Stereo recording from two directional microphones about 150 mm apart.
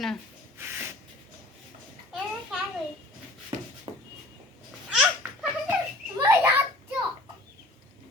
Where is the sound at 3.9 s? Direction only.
35° right (ahead or behind).